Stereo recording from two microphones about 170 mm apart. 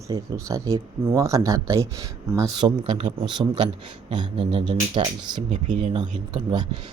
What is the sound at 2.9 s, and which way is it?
Speech, 30° right (ahead or behind).